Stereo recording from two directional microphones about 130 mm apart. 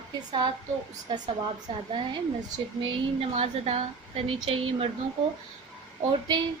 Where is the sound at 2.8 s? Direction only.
45° right (ahead or behind).